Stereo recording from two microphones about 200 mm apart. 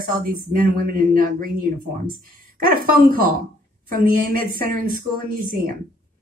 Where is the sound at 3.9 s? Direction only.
45° right (ahead or behind).